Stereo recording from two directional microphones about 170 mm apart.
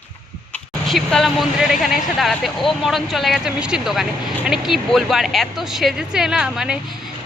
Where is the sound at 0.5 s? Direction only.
5° left (ahead or behind).